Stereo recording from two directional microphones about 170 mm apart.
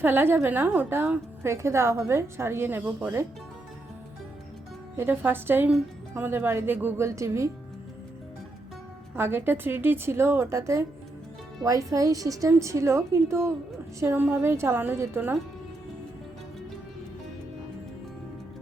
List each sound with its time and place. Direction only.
0.0 s a woman's voice: 10° right (ahead or behind)
4.9 s a woman's voice: 10° right (ahead or behind)
9.1 s a woman's voice: 15° right (ahead or behind)